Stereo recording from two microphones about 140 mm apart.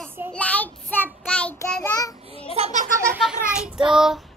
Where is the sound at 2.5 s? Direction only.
50° right (ahead or behind).